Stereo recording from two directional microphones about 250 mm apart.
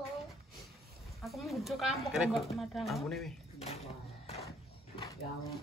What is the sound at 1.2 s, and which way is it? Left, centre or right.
Speech, centre.